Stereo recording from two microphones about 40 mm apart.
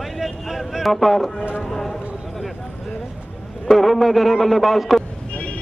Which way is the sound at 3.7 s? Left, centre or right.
Centre.